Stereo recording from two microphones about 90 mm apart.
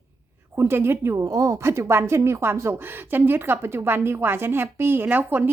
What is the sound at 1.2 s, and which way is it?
A woman's voice, 40° right (ahead or behind).